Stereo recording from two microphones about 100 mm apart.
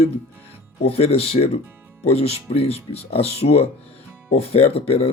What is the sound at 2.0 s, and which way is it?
Speech, 90° left.